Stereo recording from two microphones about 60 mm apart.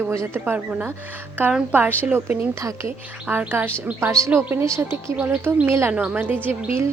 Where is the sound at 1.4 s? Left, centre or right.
Right.